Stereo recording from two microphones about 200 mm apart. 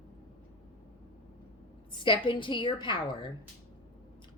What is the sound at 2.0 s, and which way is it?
Speech, 25° left (ahead or behind).